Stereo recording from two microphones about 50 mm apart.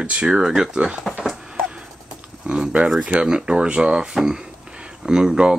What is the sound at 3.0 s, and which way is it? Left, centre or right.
Speech, centre.